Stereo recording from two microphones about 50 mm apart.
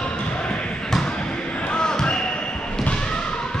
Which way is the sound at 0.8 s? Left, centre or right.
Centre.